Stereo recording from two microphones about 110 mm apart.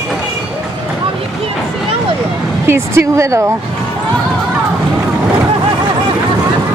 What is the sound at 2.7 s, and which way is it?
Speech, 25° right (ahead or behind).